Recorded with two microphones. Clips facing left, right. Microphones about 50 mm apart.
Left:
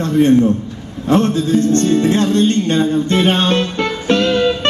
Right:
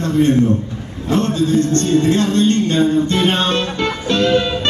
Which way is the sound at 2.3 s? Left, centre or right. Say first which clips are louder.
Left 1 dB; left.